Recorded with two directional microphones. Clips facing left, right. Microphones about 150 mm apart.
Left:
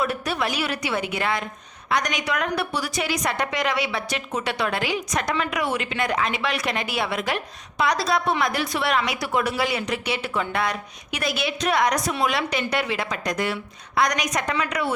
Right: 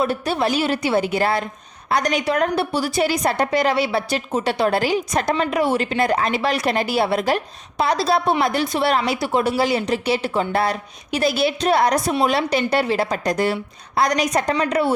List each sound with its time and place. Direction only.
0.0 s a woman's voice: 30° right (ahead or behind)